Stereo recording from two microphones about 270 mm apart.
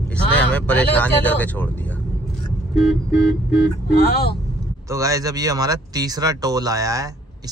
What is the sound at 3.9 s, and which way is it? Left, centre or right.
Speech, left.